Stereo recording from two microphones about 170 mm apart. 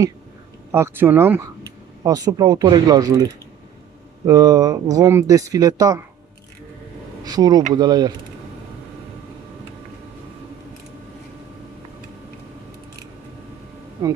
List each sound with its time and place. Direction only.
0.7 s speech: 15° right (ahead or behind)
4.3 s speech: 20° right (ahead or behind)
7.2 s speech: 25° right (ahead or behind)
14.0 s speech: 20° right (ahead or behind)